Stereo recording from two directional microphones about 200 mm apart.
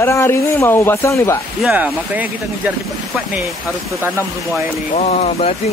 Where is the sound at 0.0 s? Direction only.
15° left (ahead or behind).